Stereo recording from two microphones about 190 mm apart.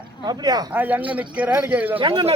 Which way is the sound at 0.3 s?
20° right (ahead or behind).